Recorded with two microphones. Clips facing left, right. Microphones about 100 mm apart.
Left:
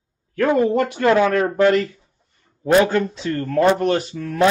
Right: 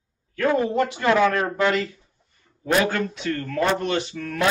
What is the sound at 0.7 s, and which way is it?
Speech, 50° left (ahead or behind).